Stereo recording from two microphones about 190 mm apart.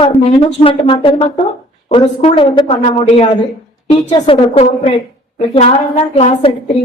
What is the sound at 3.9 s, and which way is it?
A woman's voice, 30° left (ahead or behind).